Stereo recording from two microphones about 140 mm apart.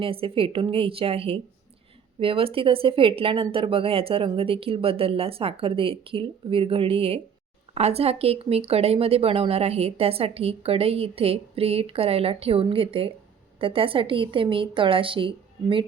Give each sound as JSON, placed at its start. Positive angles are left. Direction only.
{"t": 0.0, "sound": "speech", "side_deg": -40}